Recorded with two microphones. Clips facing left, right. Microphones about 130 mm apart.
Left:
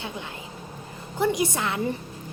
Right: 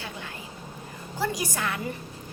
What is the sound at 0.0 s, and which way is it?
Vehicle, 20° left (ahead or behind).